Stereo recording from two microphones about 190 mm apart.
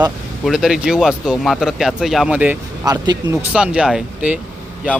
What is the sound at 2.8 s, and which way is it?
Speech, 20° right (ahead or behind).